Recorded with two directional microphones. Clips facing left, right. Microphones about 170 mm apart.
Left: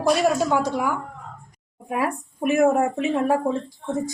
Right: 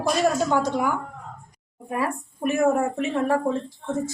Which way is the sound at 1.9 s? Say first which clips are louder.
Left 2 dB; 15° left (ahead or behind).